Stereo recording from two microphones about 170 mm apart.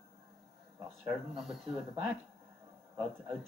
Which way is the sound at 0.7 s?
5° right (ahead or behind).